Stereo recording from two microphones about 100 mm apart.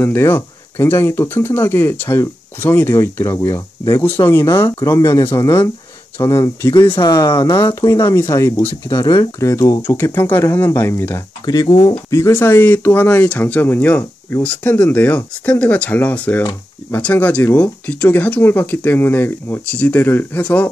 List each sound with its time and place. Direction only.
0.0 s speech: 20° left (ahead or behind)
7.0 s speech: 45° left (ahead or behind); by 11.2 s 25° left (ahead or behind)
11.4 s speech: 45° left (ahead or behind)
12.1 s speech: 25° left (ahead or behind)